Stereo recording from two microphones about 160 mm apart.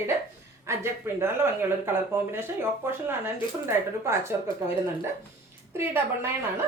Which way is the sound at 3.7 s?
15° right (ahead or behind).